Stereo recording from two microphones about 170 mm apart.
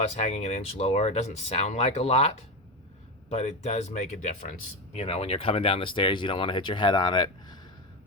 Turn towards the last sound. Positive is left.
turn(degrees=25)  # may be behind; listen again after turning